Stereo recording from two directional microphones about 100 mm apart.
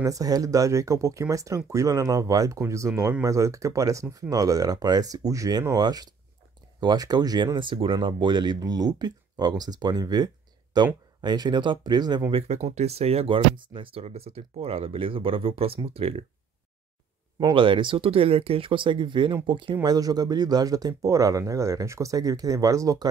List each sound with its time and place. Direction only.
0.0 s speech: 35° right (ahead or behind)
12.3 s speech: 85° right
17.6 s speech: 55° right (ahead or behind); by 23.0 s 35° right (ahead or behind)